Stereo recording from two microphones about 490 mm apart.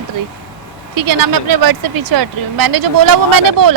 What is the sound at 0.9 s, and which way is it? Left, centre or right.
Speech, right.